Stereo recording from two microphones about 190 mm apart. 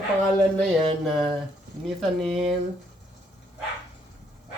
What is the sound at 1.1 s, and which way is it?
Speech, centre (ahead or behind).